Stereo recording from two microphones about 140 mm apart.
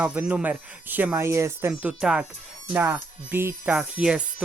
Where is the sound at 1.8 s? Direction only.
5° right (ahead or behind).